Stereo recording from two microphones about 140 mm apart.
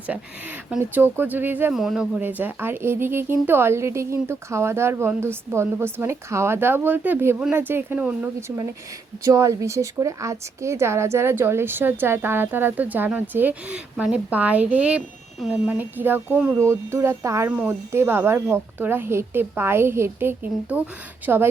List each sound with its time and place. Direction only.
0.1 s a woman's voice: 10° right (ahead or behind)
1.7 s a woman's voice: centre (ahead or behind)